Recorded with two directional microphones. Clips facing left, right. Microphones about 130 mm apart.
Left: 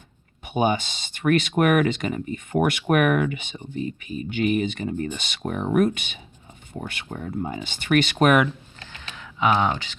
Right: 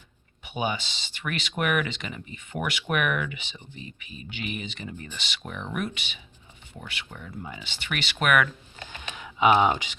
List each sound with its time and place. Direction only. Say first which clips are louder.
0.4 s speech: left 7 dB; 45° left (ahead or behind)
8.9 s computer keyboard: right 1 dB; 15° right (ahead or behind)